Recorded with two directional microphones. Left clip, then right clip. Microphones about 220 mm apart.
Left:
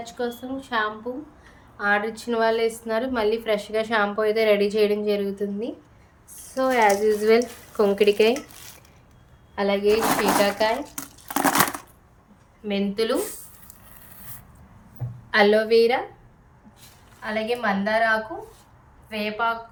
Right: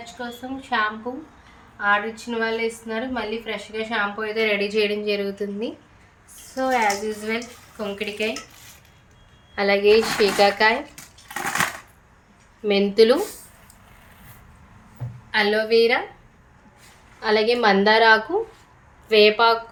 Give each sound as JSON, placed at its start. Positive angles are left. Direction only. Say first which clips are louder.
{"t": 0.2, "sound": "a woman's voice", "louder": "left 5 dB", "side_deg": 5}
{"t": 0.7, "sound": "a woman's voice", "louder": "right 3 dB", "side_deg": -5}
{"t": 6.6, "sound": "speech", "louder": "left 2 dB", "side_deg": 10}
{"t": 9.6, "sound": "speech", "louder": "right 4 dB", "side_deg": -5}
{"t": 12.6, "sound": "speech", "louder": "right 9 dB", "side_deg": -20}
{"t": 15.3, "sound": "a woman's voice", "louder": "left 2 dB", "side_deg": 15}
{"t": 17.2, "sound": "a woman's voice", "louder": "right 7 dB", "side_deg": -25}